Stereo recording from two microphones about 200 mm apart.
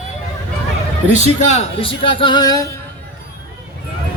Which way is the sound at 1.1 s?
35° left (ahead or behind).